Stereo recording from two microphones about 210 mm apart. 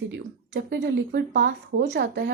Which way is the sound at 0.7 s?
55° right (ahead or behind).